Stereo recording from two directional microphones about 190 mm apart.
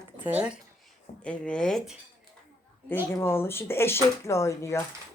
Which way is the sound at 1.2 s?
5° left (ahead or behind).